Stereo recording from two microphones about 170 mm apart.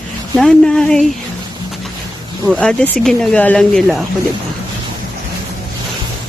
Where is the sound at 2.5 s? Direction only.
5° left (ahead or behind).